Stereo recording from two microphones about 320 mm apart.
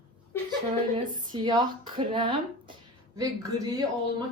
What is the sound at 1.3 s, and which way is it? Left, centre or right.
Speech, centre.